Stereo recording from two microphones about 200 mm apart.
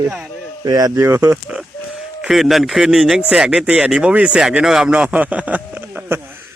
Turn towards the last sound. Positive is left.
turn(degrees=-10)  # may be behind; listen again after turning